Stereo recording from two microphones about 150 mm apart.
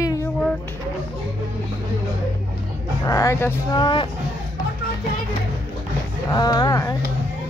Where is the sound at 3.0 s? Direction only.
20° left (ahead or behind).